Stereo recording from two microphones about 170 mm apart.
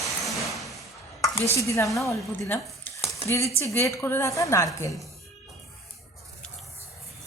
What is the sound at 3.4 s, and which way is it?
Speech, 15° right (ahead or behind).